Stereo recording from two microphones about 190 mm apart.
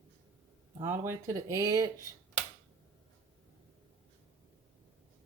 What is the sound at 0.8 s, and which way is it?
Speech, 15° right (ahead or behind).